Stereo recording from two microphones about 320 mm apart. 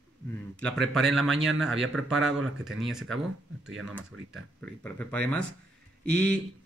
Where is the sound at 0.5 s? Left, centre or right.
Centre.